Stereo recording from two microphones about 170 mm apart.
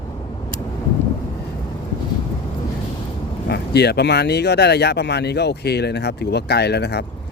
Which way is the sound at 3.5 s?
75° left (ahead or behind).